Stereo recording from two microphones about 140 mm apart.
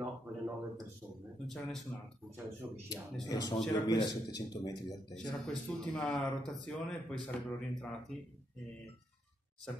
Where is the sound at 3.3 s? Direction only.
25° left (ahead or behind).